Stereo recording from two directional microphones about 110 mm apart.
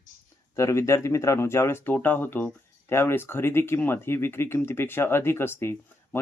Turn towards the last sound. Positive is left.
turn(degrees=20)  # may be behind; listen again after turning